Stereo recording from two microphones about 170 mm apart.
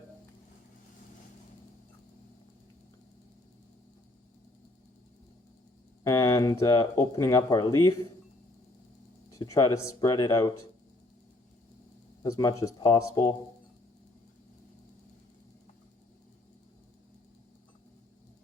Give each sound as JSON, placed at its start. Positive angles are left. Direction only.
{"t": 6.0, "sound": "a sound", "side_deg": 20}
{"t": 7.2, "sound": "speech", "side_deg": 20}
{"t": 9.3, "sound": "speech", "side_deg": 20}
{"t": 12.2, "sound": "speech", "side_deg": 20}